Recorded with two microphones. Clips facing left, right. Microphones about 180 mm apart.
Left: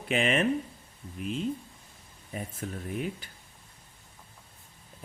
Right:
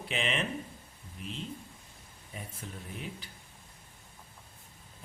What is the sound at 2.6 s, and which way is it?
Speech, 50° left (ahead or behind).